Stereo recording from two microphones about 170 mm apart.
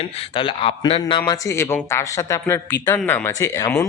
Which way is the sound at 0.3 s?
30° left (ahead or behind).